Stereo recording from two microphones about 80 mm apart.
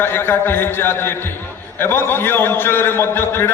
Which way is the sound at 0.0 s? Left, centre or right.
Left.